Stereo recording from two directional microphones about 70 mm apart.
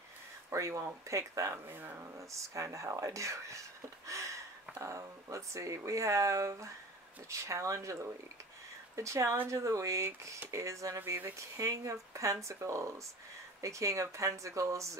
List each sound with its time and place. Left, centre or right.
0.5 s speech: right
1.8 s speech: right
2.1 s speech: right
4.1 s a sound: right
4.7 s speech: right